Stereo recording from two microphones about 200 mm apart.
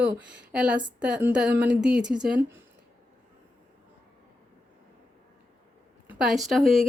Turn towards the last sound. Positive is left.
turn(degrees=0)  # may be behind; listen again after turning